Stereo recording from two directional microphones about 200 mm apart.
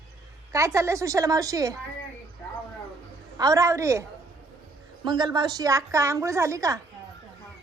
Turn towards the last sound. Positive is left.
turn(degrees=-15)  # may be behind; listen again after turning